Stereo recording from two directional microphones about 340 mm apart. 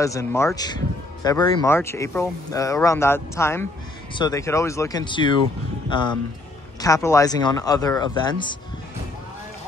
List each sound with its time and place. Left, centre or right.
0.0 s speech: centre